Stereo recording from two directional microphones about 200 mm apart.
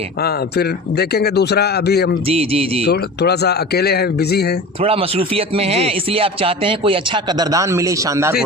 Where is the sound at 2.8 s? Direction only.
50° left (ahead or behind).